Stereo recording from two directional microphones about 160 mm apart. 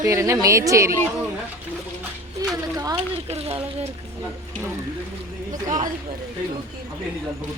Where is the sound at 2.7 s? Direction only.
25° right (ahead or behind).